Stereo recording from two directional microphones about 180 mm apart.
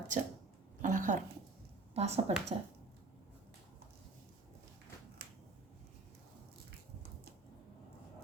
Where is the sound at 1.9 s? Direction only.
35° right (ahead or behind).